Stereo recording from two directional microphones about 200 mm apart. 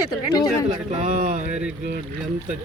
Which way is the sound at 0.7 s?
25° right (ahead or behind).